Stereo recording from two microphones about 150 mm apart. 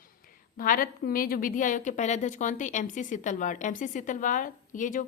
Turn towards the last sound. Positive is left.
turn(degrees=60)  # may be behind; listen again after turning